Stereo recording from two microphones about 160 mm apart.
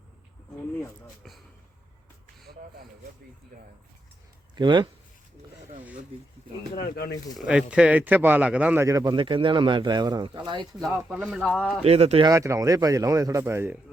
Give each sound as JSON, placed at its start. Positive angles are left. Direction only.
{"t": 4.5, "sound": "speech", "side_deg": -30}
{"t": 6.8, "sound": "speech", "side_deg": 75}
{"t": 7.3, "sound": "speech", "side_deg": -5}
{"t": 10.8, "sound": "speech", "side_deg": -5}
{"t": 11.8, "sound": "speech", "side_deg": -40}
{"t": 12.3, "sound": "speech", "side_deg": -20}